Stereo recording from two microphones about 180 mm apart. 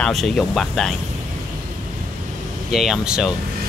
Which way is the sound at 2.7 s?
Centre (ahead or behind).